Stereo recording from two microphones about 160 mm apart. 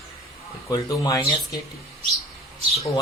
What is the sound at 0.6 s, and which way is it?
Speech, 20° left (ahead or behind).